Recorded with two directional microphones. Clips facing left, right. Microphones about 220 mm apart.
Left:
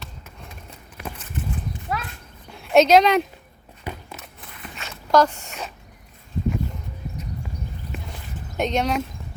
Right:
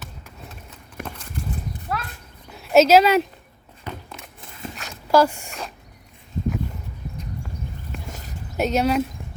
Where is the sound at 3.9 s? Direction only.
10° left (ahead or behind).